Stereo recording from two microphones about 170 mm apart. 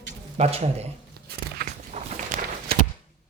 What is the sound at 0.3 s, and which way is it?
Speech, 40° right (ahead or behind).